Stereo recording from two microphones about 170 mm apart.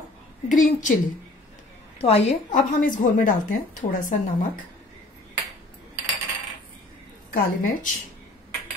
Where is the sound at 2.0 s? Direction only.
35° left (ahead or behind).